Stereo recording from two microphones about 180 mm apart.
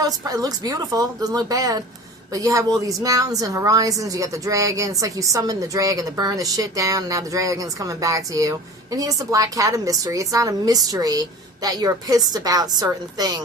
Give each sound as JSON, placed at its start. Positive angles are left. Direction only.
{"t": 0.0, "sound": "a woman's voice", "side_deg": -20}